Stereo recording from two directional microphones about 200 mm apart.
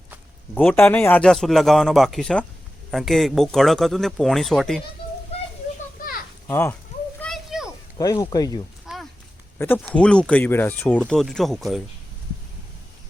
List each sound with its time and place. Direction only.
0.5 s speech: 10° left (ahead or behind)
6.5 s speech: 10° left (ahead or behind)
7.2 s a sound: centre (ahead or behind)
7.9 s speech: 20° left (ahead or behind)
8.9 s a sound: 5° right (ahead or behind)
9.6 s speech: 10° left (ahead or behind)